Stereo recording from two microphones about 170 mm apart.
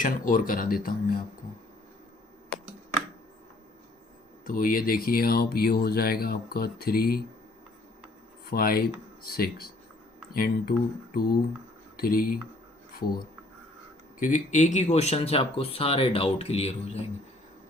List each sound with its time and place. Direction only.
0.0 s speech: 55° left (ahead or behind)
4.4 s speech: 55° left (ahead or behind)
8.4 s speech: 60° left (ahead or behind)
14.2 s speech: 50° left (ahead or behind)